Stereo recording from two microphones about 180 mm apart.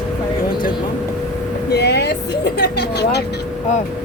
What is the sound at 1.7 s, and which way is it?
Vehicle, 65° left (ahead or behind).